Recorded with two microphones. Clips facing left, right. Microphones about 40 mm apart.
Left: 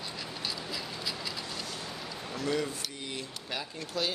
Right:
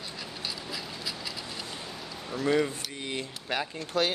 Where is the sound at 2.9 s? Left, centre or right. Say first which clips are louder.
Right 4 dB; right.